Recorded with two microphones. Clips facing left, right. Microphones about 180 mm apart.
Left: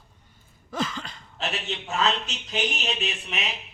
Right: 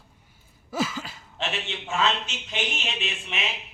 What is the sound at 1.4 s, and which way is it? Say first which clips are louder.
A man's voice: even; 40° left (ahead or behind).